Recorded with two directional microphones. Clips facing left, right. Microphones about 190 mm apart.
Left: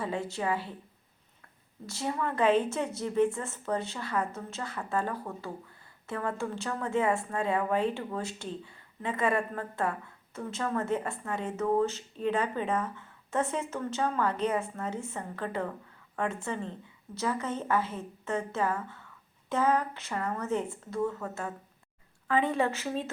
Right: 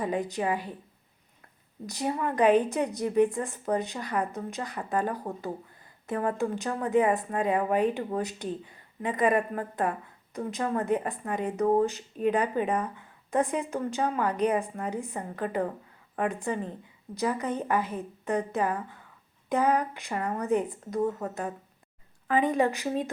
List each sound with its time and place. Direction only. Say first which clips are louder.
0.0 s speech: right 4 dB; 15° right (ahead or behind)
1.9 s speech: right 3 dB; 15° right (ahead or behind)
6.2 s speech: right 4 dB; 15° right (ahead or behind)